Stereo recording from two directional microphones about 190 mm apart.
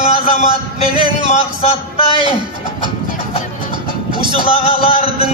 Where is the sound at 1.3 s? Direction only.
35° left (ahead or behind).